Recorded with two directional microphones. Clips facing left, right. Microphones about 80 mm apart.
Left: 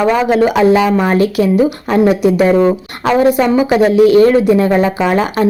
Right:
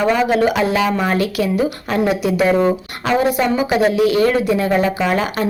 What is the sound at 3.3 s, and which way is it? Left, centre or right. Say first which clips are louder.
A woman's voice: left 5 dB; left.